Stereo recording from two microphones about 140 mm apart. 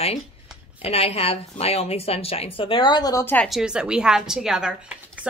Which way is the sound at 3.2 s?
10° left (ahead or behind).